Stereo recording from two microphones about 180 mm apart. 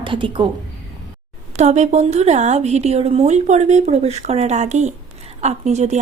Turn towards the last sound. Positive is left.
turn(degrees=-40)  # may be behind; listen again after turning